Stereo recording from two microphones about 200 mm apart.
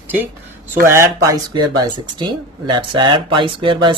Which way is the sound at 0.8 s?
15° right (ahead or behind).